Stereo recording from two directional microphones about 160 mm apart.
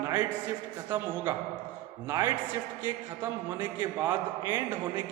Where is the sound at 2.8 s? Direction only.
10° right (ahead or behind).